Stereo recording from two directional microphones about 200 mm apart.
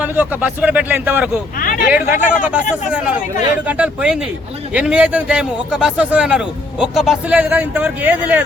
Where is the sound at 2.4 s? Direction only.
5° right (ahead or behind).